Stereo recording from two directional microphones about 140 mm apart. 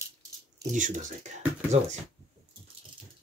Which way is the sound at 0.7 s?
60° right (ahead or behind).